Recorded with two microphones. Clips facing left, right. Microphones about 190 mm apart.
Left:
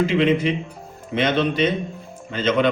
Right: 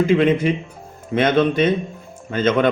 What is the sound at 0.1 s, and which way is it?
Speech, 50° right (ahead or behind).